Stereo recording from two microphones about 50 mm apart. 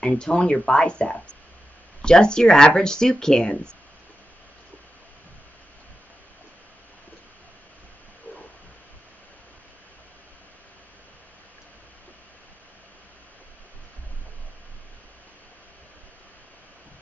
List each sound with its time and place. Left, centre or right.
0.1 s speech: centre